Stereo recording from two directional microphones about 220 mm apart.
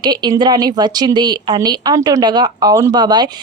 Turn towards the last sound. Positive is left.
turn(degrees=-20)  # may be behind; listen again after turning